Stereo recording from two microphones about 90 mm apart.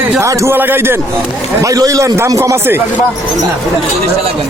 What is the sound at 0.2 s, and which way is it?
Speech, 30° right (ahead or behind).